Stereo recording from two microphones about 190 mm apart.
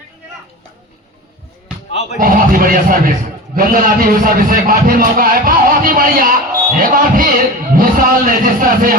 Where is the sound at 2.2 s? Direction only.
45° right (ahead or behind).